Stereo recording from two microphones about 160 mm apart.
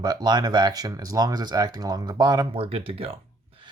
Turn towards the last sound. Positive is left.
turn(degrees=-35)  # may be behind; listen again after turning